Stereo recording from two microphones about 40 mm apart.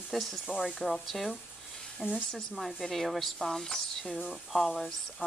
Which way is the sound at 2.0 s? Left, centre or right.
Centre.